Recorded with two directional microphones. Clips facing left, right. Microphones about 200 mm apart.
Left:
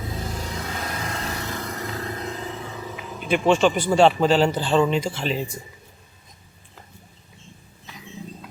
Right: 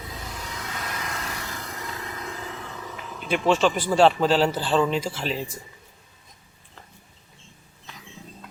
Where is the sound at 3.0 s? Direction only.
5° left (ahead or behind).